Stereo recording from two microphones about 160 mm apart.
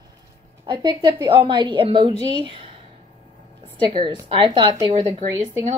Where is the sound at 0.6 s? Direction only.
30° right (ahead or behind).